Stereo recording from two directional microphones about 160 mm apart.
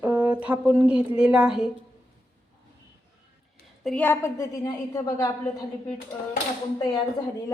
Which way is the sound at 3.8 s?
10° left (ahead or behind).